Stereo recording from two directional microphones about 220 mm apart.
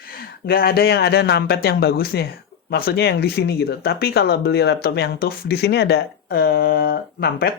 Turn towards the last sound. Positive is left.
turn(degrees=45)  # may be behind; listen again after turning